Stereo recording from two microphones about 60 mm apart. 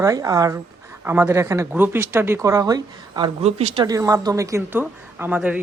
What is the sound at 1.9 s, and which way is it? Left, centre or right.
Speech, right.